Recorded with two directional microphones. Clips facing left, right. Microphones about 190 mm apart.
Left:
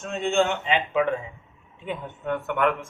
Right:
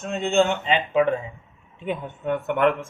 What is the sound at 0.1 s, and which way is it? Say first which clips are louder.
Speech: right 2 dB; 30° right (ahead or behind).